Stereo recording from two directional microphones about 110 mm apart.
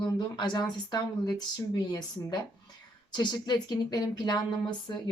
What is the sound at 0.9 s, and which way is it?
Speech, 40° left (ahead or behind).